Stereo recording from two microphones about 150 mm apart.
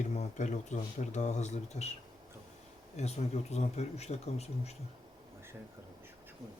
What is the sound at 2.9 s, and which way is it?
Speech, 45° left (ahead or behind).